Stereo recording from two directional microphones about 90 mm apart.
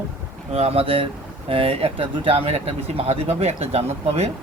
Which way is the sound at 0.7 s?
90° right.